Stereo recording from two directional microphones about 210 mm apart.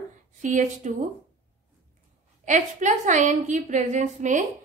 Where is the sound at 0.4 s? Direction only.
35° right (ahead or behind).